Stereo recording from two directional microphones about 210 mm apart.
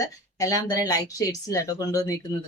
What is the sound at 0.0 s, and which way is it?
Speech, 15° left (ahead or behind).